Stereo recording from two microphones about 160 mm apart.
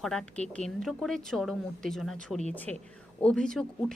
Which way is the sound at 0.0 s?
5° left (ahead or behind).